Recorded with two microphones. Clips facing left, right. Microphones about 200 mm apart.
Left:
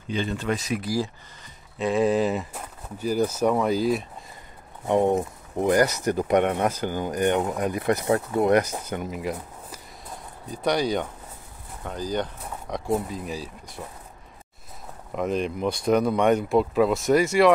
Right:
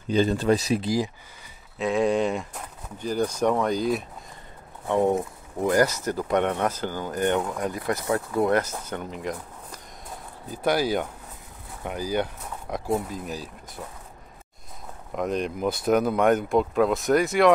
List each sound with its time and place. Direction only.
0.1 s speech: 40° right (ahead or behind)
0.8 s speech: 20° right (ahead or behind)
1.8 s speech: centre (ahead or behind)
4.8 s speech: 20° left (ahead or behind)
10.5 s speech: 5° right (ahead or behind)
15.1 s speech: centre (ahead or behind)